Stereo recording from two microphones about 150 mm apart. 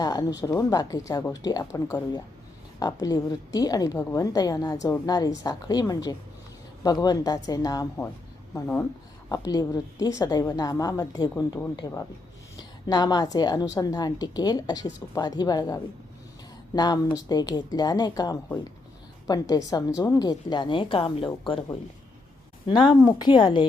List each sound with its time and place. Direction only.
0.0 s a woman's voice: 25° left (ahead or behind)